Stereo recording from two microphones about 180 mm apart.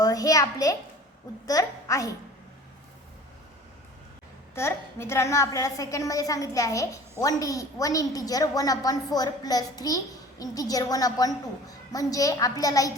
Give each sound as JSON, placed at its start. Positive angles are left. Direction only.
{"t": 0.0, "sound": "a child's voice", "side_deg": 20}
{"t": 4.5, "sound": "a woman's voice", "side_deg": 15}